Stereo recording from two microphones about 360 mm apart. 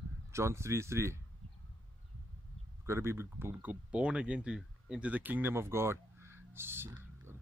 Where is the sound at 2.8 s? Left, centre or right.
Centre.